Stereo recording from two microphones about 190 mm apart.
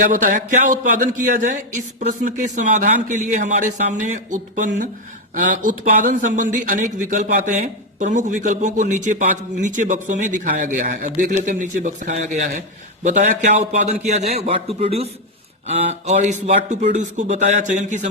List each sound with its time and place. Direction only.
0.0 s speech: 45° right (ahead or behind)